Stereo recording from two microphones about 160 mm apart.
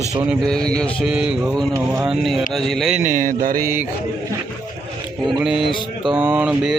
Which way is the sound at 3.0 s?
55° right (ahead or behind).